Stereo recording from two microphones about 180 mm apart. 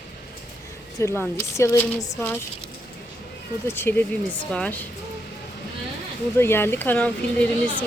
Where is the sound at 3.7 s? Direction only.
10° left (ahead or behind).